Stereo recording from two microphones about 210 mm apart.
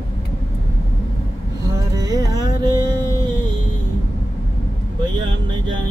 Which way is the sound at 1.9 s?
15° right (ahead or behind).